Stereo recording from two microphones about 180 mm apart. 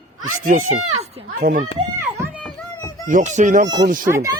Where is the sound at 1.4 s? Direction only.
50° right (ahead or behind).